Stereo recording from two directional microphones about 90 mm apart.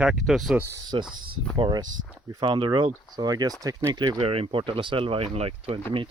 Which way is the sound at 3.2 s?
45° right (ahead or behind).